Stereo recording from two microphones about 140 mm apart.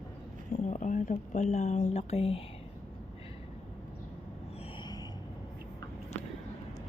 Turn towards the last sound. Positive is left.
turn(degrees=30)  # may be behind; listen again after turning